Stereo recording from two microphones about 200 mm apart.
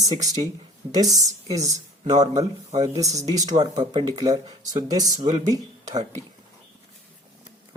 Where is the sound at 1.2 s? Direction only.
15° right (ahead or behind).